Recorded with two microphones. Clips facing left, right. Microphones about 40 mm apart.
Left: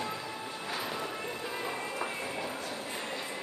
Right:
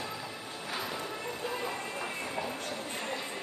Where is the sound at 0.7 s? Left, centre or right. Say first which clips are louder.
Even; centre.